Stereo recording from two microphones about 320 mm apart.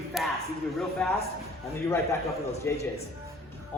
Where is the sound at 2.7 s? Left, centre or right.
Centre.